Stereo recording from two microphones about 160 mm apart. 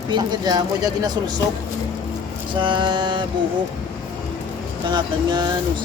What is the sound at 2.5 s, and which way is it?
Speech, 30° right (ahead or behind).